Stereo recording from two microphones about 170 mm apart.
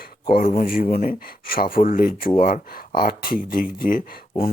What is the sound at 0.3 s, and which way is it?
Speech, 60° left (ahead or behind).